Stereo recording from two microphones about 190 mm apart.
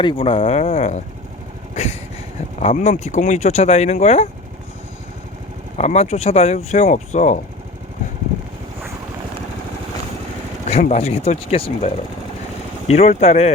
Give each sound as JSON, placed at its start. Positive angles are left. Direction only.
{"t": 0.0, "sound": "speech", "side_deg": 25}
{"t": 1.7, "sound": "vehicle", "side_deg": 35}
{"t": 2.6, "sound": "speech", "side_deg": 35}
{"t": 5.7, "sound": "speech", "side_deg": 35}
{"t": 10.7, "sound": "speech", "side_deg": 35}
{"t": 12.9, "sound": "speech", "side_deg": 35}